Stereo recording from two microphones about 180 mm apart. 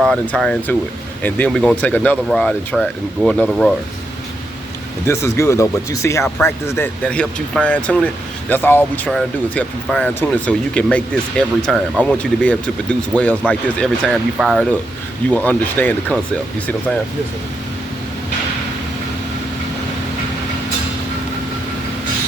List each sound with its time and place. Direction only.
0.0 s speech: 5° left (ahead or behind)
5.0 s speech: 15° left (ahead or behind)